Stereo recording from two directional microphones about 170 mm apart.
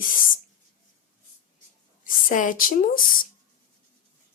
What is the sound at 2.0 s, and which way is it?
Speech, 50° left (ahead or behind).